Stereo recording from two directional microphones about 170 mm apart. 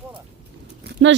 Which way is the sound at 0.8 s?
90° right.